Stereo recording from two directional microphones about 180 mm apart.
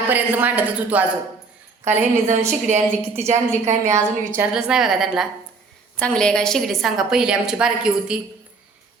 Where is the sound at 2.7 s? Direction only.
40° right (ahead or behind).